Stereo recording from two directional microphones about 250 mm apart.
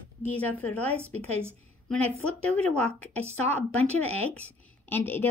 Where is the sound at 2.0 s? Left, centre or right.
Right.